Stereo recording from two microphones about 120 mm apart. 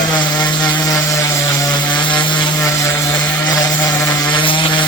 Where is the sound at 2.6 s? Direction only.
25° left (ahead or behind).